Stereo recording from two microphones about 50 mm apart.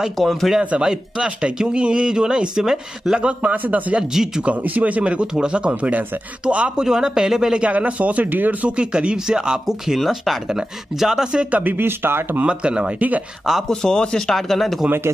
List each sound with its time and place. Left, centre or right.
0.2 s speech: centre
0.6 s speech: centre
3.2 s speech: right
3.5 s a man's voice: right
4.1 s speech: centre
4.5 s speech: right
6.8 s speech: centre
7.6 s speech: right
9.9 s speech: centre
11.5 s speech: right
12.4 s speech: centre
13.7 s a man's voice: centre
14.3 s speech: centre